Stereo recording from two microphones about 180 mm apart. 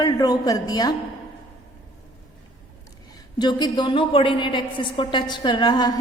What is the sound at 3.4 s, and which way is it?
A woman's voice, 25° left (ahead or behind).